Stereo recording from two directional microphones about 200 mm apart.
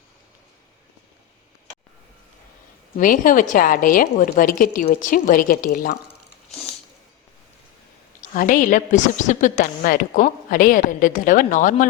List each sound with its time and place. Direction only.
3.0 s a woman's voice: 40° left (ahead or behind)
8.2 s a woman's voice: 40° left (ahead or behind)